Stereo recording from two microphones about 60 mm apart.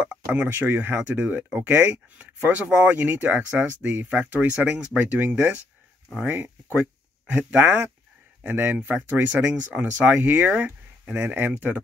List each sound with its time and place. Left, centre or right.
0.3 s speech: right